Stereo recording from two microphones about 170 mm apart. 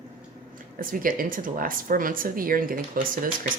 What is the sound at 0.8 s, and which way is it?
A woman's voice, 55° right (ahead or behind).